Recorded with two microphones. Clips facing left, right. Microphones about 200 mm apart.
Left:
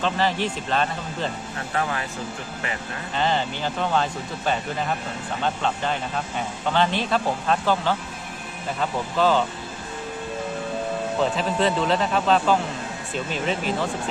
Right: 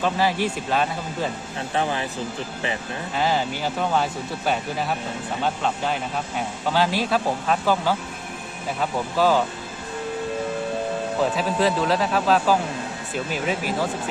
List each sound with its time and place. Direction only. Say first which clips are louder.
0.0 s speech: right 1 dB; 10° right (ahead or behind)
1.5 s speech: right 3 dB; 25° right (ahead or behind)
3.2 s speech: right 1 dB; 5° right (ahead or behind)
11.2 s speech: right 1 dB; 5° right (ahead or behind)